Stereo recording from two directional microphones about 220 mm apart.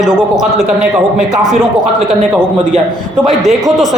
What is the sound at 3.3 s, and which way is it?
Speech, centre (ahead or behind).